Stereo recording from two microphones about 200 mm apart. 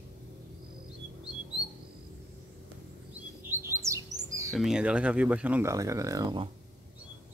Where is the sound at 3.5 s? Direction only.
15° right (ahead or behind).